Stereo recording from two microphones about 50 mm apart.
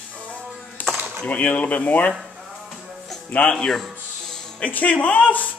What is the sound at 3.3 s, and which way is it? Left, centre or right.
Speech, left.